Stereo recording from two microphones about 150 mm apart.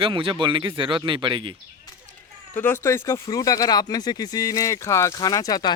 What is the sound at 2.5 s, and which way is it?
Speech, 15° left (ahead or behind).